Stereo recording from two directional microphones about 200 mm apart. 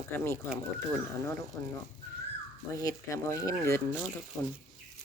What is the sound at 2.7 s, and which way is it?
Speech, 15° left (ahead or behind).